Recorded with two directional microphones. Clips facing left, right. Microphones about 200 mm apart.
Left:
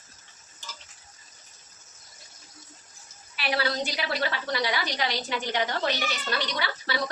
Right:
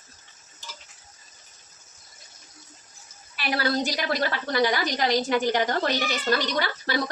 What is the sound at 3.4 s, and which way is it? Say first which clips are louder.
A woman's voice: right 3 dB; 45° right (ahead or behind).